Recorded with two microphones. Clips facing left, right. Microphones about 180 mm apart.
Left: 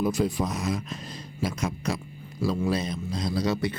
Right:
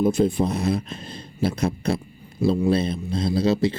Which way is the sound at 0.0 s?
25° right (ahead or behind).